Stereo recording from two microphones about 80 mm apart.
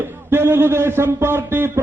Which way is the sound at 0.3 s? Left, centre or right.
Right.